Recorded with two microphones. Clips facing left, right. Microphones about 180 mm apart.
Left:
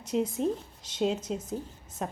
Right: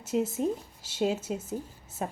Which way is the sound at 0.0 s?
5° right (ahead or behind).